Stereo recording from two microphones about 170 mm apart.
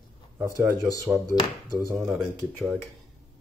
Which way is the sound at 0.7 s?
20° left (ahead or behind).